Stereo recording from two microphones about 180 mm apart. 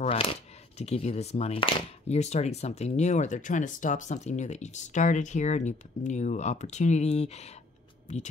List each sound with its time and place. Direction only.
0.0 s speech: 35° left (ahead or behind)